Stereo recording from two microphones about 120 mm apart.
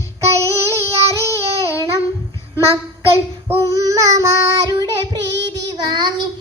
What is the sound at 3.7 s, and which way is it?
Child singing, 30° right (ahead or behind).